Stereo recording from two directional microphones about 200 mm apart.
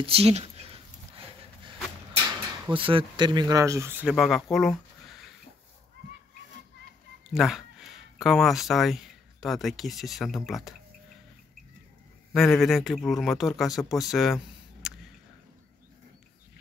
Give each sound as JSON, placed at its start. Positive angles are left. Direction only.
{"t": 0.0, "sound": "a sound", "side_deg": -30}
{"t": 2.6, "sound": "speech", "side_deg": -25}
{"t": 4.1, "sound": "speech", "side_deg": 0}
{"t": 7.2, "sound": "speech", "side_deg": 0}
{"t": 12.3, "sound": "a man's voice", "side_deg": 0}